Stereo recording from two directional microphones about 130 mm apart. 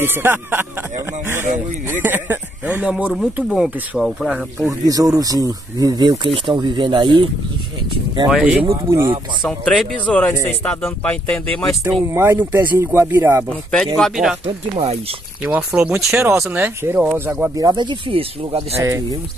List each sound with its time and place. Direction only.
0.0 s speech: 15° right (ahead or behind)
4.6 s speech: 30° right (ahead or behind)
8.3 s speech: 5° right (ahead or behind)
12.1 s speech: 20° right (ahead or behind)
13.5 s speech: 5° left (ahead or behind)
15.4 s speech: 10° right (ahead or behind)
17.6 s speech: 35° right (ahead or behind)
18.8 s speech: 25° right (ahead or behind)